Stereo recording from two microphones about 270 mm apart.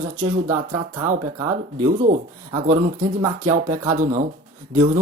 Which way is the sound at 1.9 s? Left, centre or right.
Right.